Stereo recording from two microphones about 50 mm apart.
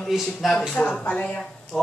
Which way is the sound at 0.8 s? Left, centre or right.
Left.